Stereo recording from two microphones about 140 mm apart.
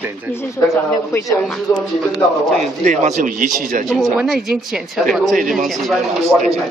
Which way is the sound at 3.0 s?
65° right (ahead or behind).